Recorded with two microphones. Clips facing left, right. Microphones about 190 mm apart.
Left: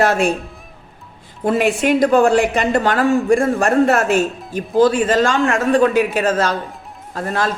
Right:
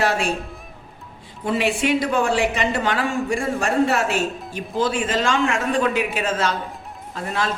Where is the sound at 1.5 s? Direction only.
45° left (ahead or behind).